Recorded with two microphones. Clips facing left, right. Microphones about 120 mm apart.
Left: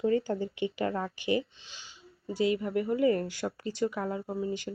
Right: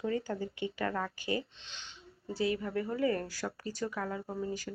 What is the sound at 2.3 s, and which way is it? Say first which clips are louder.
Speech: left 4 dB; 20° left (ahead or behind).